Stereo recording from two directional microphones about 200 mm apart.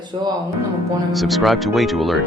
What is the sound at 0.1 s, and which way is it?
Speech, 20° right (ahead or behind).